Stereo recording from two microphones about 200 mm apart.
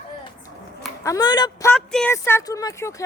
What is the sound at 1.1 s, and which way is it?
Speech, 20° left (ahead or behind).